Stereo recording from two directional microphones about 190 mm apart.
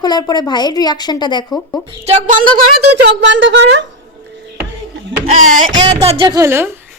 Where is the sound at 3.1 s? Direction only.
70° right (ahead or behind).